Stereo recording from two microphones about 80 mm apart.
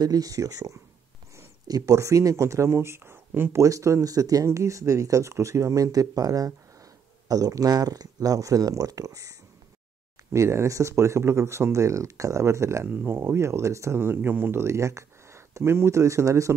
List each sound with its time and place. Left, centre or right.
0.0 s speech: right
3.6 s speech: right
10.3 s speech: right
12.8 s speech: right